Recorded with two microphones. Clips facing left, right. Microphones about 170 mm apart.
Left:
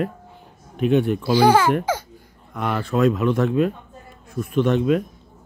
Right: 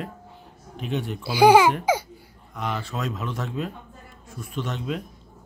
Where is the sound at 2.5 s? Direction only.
55° left (ahead or behind).